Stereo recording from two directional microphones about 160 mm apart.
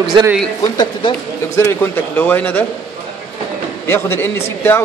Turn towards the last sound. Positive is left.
turn(degrees=15)  # may be behind; listen again after turning